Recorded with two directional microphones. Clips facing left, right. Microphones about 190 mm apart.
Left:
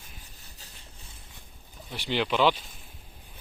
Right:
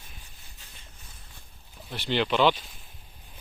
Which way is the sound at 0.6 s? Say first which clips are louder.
Left 2 dB; 35° left (ahead or behind).